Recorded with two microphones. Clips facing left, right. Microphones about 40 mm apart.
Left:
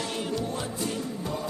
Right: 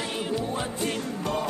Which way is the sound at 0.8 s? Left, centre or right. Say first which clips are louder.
Right 3 dB; right.